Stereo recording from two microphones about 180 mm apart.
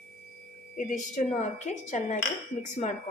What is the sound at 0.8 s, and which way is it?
Speech, 45° left (ahead or behind).